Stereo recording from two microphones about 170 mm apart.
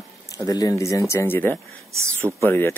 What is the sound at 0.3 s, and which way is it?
Speech, 20° left (ahead or behind).